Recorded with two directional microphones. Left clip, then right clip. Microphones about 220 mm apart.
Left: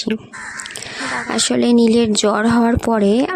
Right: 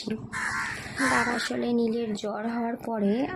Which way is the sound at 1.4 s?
45° left (ahead or behind).